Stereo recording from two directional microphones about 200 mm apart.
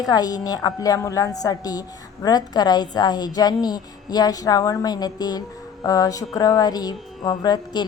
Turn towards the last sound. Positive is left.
turn(degrees=20)  # may be behind; listen again after turning